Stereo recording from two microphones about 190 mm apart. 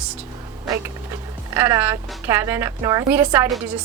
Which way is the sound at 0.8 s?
15° right (ahead or behind).